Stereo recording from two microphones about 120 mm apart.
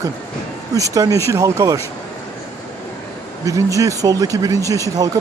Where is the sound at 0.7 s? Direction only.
30° right (ahead or behind).